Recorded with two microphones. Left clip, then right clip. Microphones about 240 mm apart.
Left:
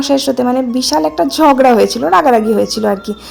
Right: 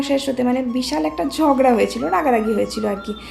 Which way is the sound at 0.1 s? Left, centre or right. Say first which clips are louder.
Left 7 dB; left.